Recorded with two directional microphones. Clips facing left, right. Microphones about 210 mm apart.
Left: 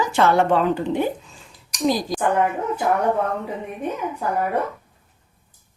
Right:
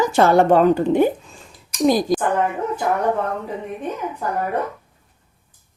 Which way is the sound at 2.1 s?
50° right (ahead or behind).